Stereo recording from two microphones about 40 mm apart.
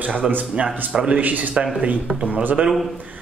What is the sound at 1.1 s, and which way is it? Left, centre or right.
Speech, right.